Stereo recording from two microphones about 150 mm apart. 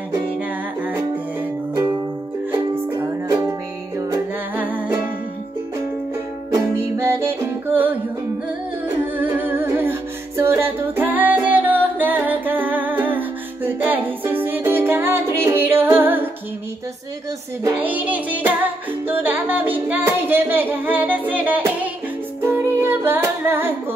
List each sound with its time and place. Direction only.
2.7 s music: 15° right (ahead or behind)
4.6 s music: 10° right (ahead or behind)
6.8 s music: 15° right (ahead or behind)
17.7 s child singing: 10° right (ahead or behind)
19.0 s music: 10° right (ahead or behind)